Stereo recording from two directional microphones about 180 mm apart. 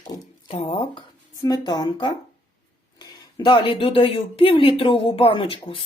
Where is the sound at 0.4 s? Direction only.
35° left (ahead or behind).